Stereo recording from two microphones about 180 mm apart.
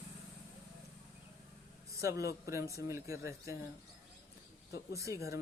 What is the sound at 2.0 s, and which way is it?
Speech, 15° right (ahead or behind).